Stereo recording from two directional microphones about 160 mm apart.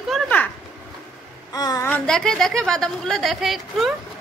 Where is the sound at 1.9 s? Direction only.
5° left (ahead or behind).